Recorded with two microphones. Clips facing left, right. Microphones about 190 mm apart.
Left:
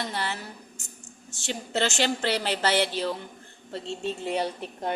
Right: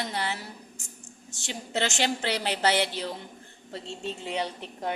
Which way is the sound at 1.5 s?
15° right (ahead or behind).